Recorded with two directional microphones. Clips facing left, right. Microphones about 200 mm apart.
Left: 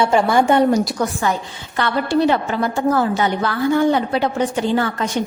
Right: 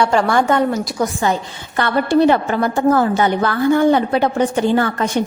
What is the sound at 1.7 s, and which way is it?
A woman's voice, 50° right (ahead or behind).